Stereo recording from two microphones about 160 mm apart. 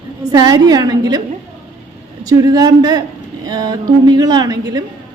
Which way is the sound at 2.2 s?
20° right (ahead or behind).